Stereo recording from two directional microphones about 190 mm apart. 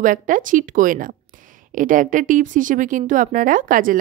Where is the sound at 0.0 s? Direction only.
45° right (ahead or behind).